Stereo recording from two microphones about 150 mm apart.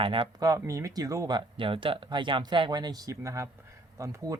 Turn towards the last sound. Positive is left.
turn(degrees=-20)  # may be behind; listen again after turning